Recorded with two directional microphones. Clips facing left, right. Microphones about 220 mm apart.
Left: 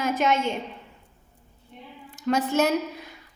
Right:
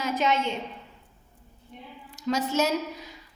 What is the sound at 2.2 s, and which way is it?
Speech, 55° left (ahead or behind).